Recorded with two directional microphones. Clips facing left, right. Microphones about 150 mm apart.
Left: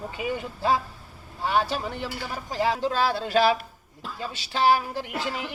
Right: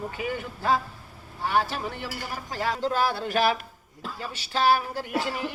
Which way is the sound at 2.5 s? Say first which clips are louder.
Left 2 dB; 20° left (ahead or behind).